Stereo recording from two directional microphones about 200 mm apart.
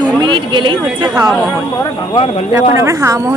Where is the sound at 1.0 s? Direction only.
5° right (ahead or behind).